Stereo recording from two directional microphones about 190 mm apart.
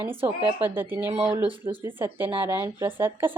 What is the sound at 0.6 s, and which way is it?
Speech, 10° right (ahead or behind).